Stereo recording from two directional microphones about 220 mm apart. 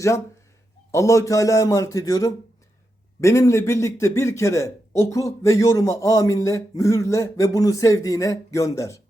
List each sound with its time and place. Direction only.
0.9 s a man's voice: 15° left (ahead or behind)